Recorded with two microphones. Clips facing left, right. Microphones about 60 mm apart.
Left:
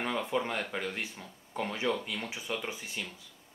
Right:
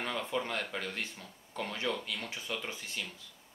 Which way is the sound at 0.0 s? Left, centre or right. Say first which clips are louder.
Left 3 dB; centre.